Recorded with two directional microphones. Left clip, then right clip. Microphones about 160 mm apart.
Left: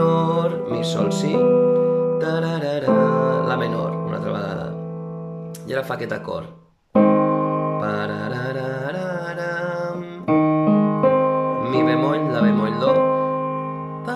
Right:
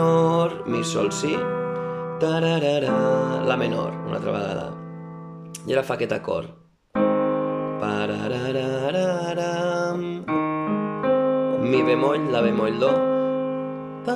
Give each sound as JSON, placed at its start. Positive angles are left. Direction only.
{"t": 0.0, "sound": "music", "side_deg": -15}
{"t": 1.3, "sound": "speech", "side_deg": 30}
{"t": 2.1, "sound": "speech", "side_deg": -10}
{"t": 5.7, "sound": "speech", "side_deg": -10}
{"t": 6.9, "sound": "music", "side_deg": 40}
{"t": 7.8, "sound": "mantra", "side_deg": -10}
{"t": 10.2, "sound": "piano", "side_deg": 35}
{"t": 11.6, "sound": "speech", "side_deg": -15}